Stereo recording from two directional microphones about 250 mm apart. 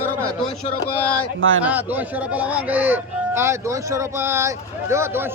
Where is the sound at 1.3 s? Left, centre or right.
Right.